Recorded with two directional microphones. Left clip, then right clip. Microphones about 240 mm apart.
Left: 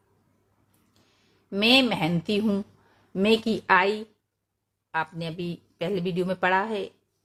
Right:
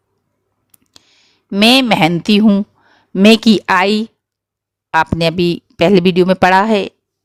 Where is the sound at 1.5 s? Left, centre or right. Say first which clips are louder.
Right 10 dB; right.